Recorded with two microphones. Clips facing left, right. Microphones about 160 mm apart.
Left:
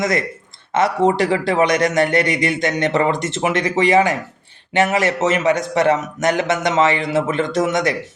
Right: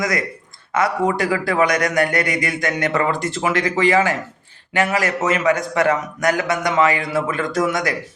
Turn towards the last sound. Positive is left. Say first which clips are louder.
# left 2 dB
turn(degrees=20)  # may be behind; listen again after turning